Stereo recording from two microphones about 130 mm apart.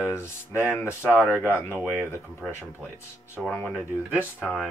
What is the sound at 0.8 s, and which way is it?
Speech, 15° right (ahead or behind).